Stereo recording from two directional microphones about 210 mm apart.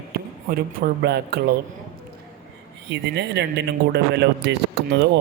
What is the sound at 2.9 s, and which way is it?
Speech, 55° right (ahead or behind).